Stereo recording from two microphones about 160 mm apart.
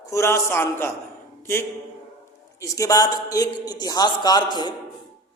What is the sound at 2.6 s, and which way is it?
Speech, 20° left (ahead or behind).